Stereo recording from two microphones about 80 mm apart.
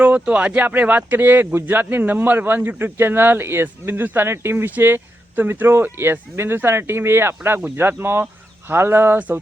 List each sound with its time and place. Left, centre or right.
0.0 s speech: centre